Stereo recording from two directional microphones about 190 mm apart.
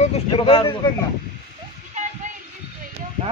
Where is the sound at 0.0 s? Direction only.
30° left (ahead or behind).